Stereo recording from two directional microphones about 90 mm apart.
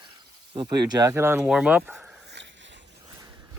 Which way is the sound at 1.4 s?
10° right (ahead or behind).